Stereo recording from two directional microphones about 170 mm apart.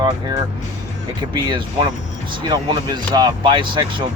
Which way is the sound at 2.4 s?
25° right (ahead or behind).